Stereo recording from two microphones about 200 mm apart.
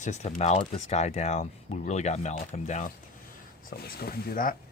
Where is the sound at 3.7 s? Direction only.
50° left (ahead or behind).